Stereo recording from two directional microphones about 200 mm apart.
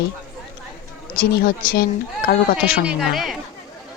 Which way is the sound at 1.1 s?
45° left (ahead or behind).